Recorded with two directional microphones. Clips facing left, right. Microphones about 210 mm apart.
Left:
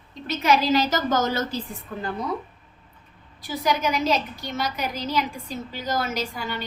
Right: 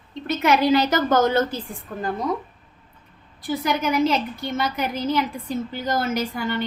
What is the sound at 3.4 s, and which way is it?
A woman's voice, 55° right (ahead or behind).